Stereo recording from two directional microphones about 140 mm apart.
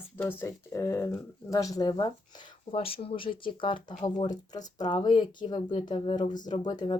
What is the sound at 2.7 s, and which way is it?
Speech, 40° left (ahead or behind).